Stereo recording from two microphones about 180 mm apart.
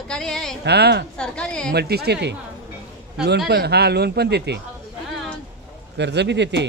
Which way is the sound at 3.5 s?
65° right (ahead or behind).